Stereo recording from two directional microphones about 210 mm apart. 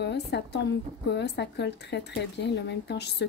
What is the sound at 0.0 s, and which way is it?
A woman's voice, 55° left (ahead or behind).